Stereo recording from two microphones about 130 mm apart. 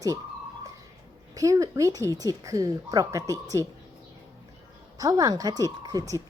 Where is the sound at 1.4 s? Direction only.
25° right (ahead or behind).